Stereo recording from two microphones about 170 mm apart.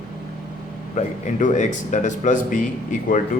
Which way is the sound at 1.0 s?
45° left (ahead or behind).